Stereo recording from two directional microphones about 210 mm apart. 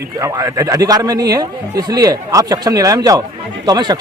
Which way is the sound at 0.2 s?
15° right (ahead or behind).